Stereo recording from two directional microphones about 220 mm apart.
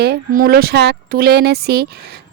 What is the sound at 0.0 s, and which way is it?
A woman's voice, 45° right (ahead or behind).